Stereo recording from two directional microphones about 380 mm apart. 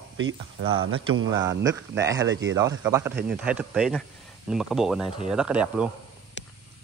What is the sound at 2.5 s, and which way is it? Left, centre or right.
Speech, centre.